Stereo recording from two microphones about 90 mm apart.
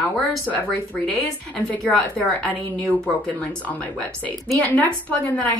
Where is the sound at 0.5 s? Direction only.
10° left (ahead or behind).